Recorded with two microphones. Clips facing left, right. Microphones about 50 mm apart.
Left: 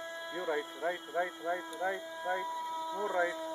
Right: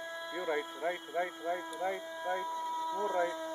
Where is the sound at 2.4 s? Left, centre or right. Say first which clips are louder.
Right 1 dB; centre.